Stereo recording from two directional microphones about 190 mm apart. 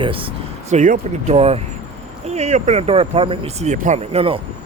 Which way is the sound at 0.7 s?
40° right (ahead or behind).